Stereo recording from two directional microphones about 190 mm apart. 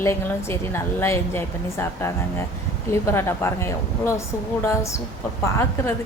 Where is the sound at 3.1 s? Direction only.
15° left (ahead or behind).